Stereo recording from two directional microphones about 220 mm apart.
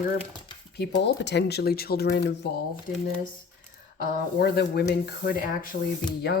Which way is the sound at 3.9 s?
45° left (ahead or behind).